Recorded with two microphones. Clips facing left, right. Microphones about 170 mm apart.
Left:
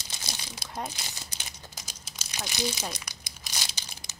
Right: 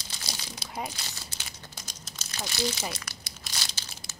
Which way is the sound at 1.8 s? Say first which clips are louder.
Right 1 dB; 10° left (ahead or behind).